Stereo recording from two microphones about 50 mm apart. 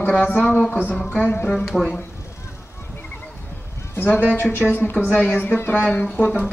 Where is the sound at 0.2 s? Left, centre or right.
Left.